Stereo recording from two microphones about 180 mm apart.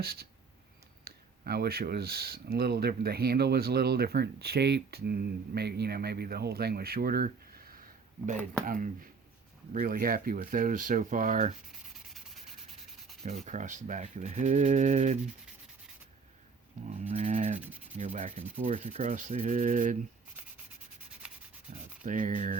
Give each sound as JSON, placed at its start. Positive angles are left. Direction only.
{"t": 0.0, "sound": "speech", "side_deg": -60}
{"t": 11.7, "sound": "sanding", "side_deg": 0}
{"t": 13.2, "sound": "speech", "side_deg": -40}
{"t": 17.0, "sound": "rub", "side_deg": -40}
{"t": 17.9, "sound": "speech", "side_deg": -45}
{"t": 22.0, "sound": "speech", "side_deg": -45}